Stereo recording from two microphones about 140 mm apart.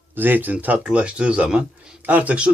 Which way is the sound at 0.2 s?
15° right (ahead or behind).